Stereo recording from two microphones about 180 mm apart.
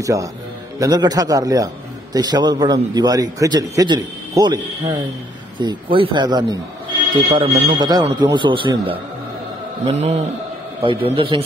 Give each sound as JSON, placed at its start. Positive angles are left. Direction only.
{"t": 0.0, "sound": "a man's voice", "side_deg": -20}